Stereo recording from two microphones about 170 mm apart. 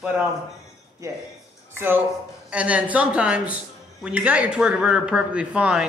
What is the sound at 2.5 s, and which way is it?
Speech, 10° right (ahead or behind).